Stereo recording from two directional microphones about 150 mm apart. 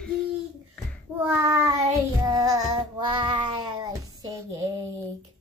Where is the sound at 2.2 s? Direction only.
25° right (ahead or behind).